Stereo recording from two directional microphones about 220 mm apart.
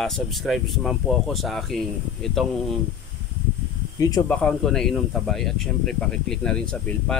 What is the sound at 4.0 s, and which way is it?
Speech, 15° left (ahead or behind).